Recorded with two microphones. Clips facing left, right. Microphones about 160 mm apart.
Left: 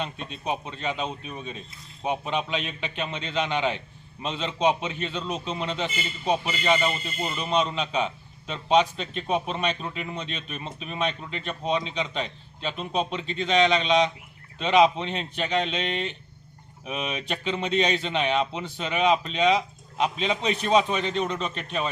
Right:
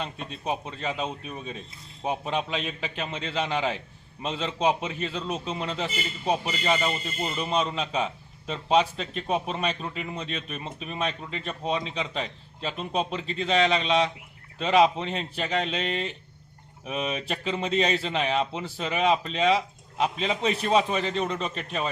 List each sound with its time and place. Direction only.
0.0 s a man's voice: centre (ahead or behind)